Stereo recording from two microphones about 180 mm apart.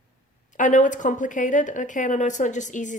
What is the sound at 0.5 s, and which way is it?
A woman's voice, 45° left (ahead or behind).